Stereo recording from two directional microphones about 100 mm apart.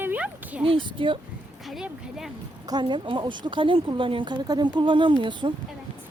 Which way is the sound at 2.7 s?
50° right (ahead or behind).